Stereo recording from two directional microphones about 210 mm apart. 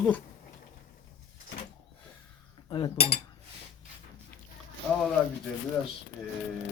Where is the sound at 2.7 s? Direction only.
25° left (ahead or behind).